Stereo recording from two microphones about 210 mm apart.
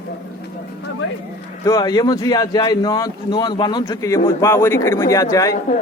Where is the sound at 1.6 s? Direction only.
15° left (ahead or behind).